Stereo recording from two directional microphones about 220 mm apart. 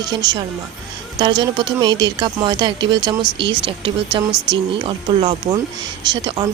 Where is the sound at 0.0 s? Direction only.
20° right (ahead or behind).